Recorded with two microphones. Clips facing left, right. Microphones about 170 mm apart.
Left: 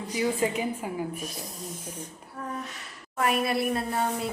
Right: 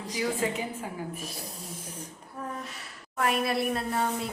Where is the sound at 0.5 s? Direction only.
15° left (ahead or behind).